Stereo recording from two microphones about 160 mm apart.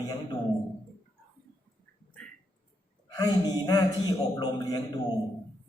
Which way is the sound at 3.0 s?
25° left (ahead or behind).